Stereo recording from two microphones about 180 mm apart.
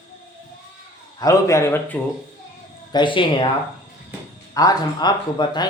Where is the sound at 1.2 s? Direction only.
15° left (ahead or behind).